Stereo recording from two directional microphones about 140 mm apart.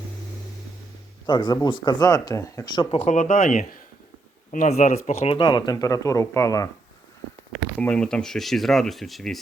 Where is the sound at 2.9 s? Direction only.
60° left (ahead or behind); by 3.7 s 80° left.